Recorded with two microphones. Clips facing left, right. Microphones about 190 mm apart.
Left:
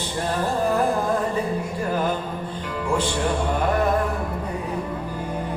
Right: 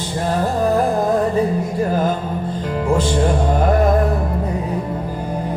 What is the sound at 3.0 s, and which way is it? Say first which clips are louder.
Music: right 6 dB; 40° right (ahead or behind).